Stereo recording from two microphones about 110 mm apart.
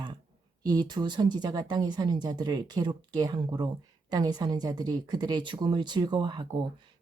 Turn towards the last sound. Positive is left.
turn(degrees=-45)  # may be behind; listen again after turning